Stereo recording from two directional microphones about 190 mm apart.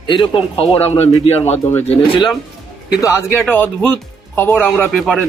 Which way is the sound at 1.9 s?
30° left (ahead or behind).